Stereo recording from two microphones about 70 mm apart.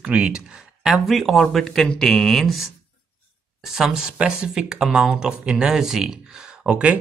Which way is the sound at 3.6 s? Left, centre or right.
Centre.